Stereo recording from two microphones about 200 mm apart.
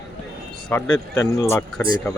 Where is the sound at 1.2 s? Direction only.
15° left (ahead or behind).